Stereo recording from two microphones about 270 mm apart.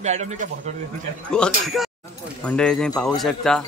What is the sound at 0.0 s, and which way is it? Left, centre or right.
Speech, right.